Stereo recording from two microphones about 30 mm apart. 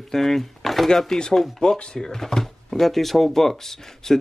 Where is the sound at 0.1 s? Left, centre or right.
Centre.